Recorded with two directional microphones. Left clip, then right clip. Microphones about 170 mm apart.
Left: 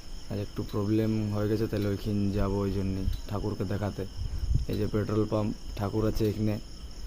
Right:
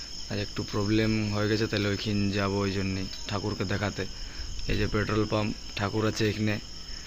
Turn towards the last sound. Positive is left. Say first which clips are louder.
# right 2 dB
turn(degrees=15)  # may be behind; listen again after turning